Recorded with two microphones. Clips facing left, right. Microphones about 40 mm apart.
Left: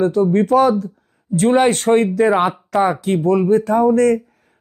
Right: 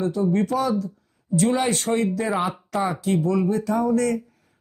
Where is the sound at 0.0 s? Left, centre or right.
Left.